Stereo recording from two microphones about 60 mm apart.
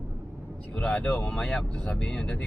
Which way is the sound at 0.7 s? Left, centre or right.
Centre.